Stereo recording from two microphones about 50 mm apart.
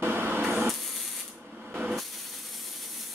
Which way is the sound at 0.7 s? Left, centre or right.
Centre.